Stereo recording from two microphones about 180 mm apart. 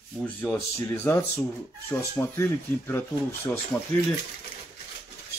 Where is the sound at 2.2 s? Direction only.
15° left (ahead or behind).